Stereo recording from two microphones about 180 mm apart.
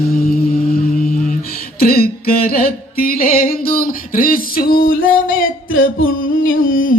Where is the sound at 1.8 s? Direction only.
55° left (ahead or behind).